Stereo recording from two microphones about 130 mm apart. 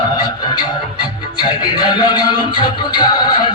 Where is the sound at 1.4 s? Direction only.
35° left (ahead or behind).